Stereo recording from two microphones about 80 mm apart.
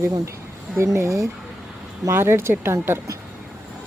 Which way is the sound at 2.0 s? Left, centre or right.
Right.